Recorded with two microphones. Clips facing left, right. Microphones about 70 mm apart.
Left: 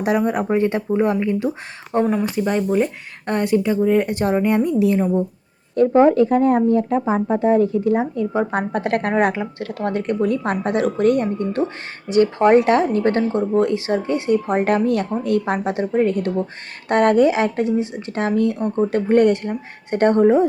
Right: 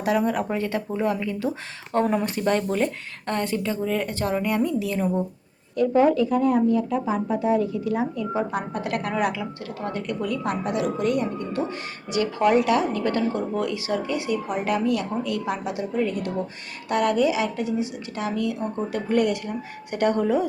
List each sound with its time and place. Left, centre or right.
0.0 s speech: left
2.3 s speech: centre
5.7 s speech: left
12.0 s a woman's voice: left